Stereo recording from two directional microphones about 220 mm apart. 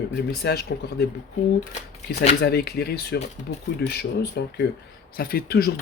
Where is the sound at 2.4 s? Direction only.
45° left (ahead or behind).